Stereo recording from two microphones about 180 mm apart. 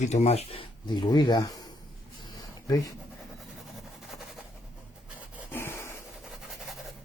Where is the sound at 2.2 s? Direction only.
20° left (ahead or behind).